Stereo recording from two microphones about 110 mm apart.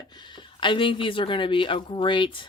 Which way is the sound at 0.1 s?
45° left (ahead or behind).